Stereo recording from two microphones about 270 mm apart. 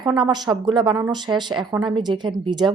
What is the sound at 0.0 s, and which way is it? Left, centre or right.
A woman's voice, centre.